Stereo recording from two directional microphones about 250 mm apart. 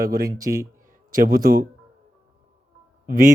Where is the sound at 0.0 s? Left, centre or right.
Right.